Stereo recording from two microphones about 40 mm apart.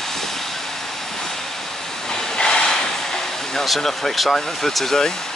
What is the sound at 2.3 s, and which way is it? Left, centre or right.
Train, centre.